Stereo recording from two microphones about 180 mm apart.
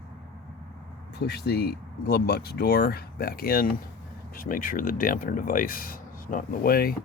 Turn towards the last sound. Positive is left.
turn(degrees=55)  # may be behind; listen again after turning